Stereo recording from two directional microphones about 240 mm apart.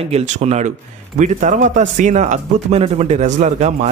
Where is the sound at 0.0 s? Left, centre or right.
Right.